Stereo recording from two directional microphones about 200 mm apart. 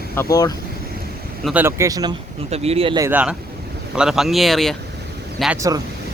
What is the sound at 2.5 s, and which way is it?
Speech, 30° right (ahead or behind).